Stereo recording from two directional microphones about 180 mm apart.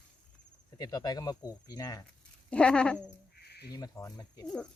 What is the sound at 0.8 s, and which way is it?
Speech, 20° left (ahead or behind).